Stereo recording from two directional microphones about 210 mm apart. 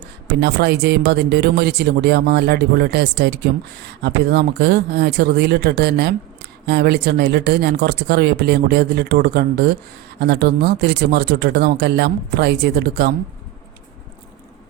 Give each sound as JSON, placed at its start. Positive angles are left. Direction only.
{"t": 0.3, "sound": "speech", "side_deg": -50}